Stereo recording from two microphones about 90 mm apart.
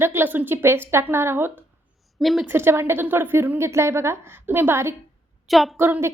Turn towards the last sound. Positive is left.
turn(degrees=-25)  # may be behind; listen again after turning